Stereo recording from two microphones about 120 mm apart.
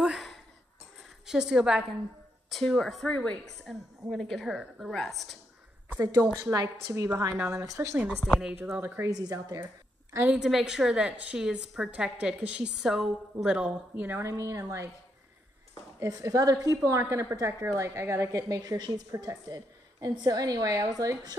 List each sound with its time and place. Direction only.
0.0 s a sound: 5° right (ahead or behind)
1.2 s a woman's voice: 5° right (ahead or behind)
6.4 s a woman's voice: 30° right (ahead or behind)
8.3 s a woman's voice: 5° right (ahead or behind)
8.5 s a woman's voice: 15° right (ahead or behind)
9.1 s a woman's voice: 30° right (ahead or behind)
10.3 s a woman's voice: 5° right (ahead or behind); by 14.9 s 25° right (ahead or behind)
16.0 s a woman's voice: 30° right (ahead or behind)